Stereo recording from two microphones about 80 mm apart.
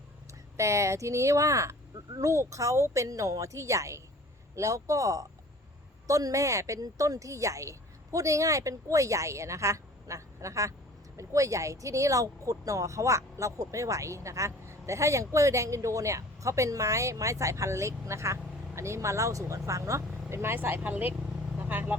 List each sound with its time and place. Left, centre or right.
0.5 s speech: right